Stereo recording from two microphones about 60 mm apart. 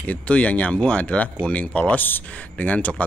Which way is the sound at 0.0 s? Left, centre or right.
Left.